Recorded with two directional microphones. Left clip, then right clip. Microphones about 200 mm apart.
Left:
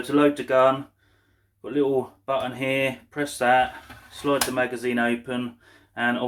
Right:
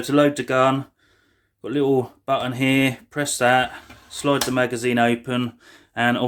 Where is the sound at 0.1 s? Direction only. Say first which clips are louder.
Right 2 dB; 55° right (ahead or behind).